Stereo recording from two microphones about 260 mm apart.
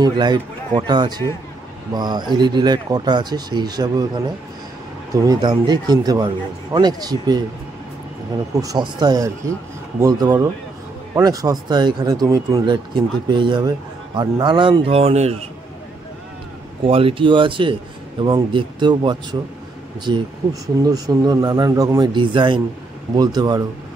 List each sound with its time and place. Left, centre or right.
0.0 s speech: centre
5.2 s speech: centre
8.5 s speech: centre
16.8 s speech: right